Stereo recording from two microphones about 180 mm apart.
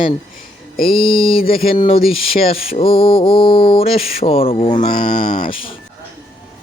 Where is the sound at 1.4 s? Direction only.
55° left (ahead or behind).